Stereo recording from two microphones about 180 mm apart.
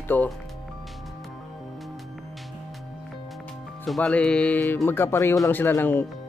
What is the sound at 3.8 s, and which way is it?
Speech, 5° left (ahead or behind).